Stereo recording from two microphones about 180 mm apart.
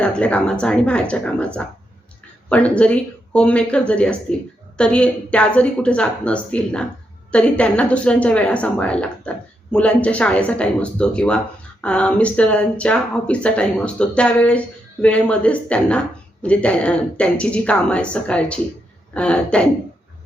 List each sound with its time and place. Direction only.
0.0 s speech: 5° left (ahead or behind)